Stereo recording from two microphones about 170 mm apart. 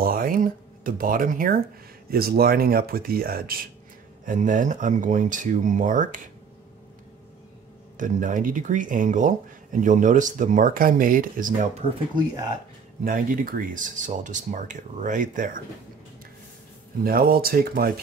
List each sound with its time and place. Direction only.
0.0 s a sound: 60° right (ahead or behind)
2.0 s speech: 60° right (ahead or behind)
4.3 s speech: 50° right (ahead or behind)
8.0 s speech: 50° right (ahead or behind)
13.0 s speech: 55° right (ahead or behind)
17.0 s speech: 60° right (ahead or behind)